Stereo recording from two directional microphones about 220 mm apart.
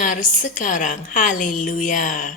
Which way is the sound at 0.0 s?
35° left (ahead or behind).